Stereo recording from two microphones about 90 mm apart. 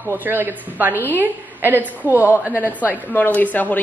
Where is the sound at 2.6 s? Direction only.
20° left (ahead or behind).